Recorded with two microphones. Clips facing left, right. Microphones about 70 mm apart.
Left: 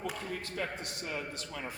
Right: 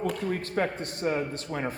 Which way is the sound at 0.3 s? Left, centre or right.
Right.